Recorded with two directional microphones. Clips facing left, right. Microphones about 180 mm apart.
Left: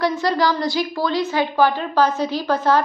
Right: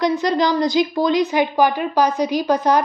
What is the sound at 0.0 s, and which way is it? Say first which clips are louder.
A woman's voice: right 1 dB; 20° right (ahead or behind).